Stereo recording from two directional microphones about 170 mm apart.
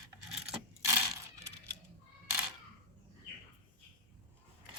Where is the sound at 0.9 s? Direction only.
15° right (ahead or behind).